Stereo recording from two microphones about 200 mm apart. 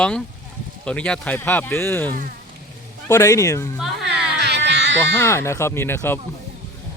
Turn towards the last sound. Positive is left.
turn(degrees=10)  # may be behind; listen again after turning